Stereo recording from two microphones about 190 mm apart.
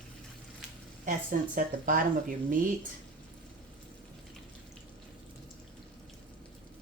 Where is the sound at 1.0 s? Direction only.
45° right (ahead or behind).